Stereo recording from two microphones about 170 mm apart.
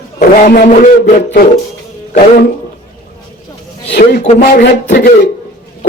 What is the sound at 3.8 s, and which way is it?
Speech, 85° left.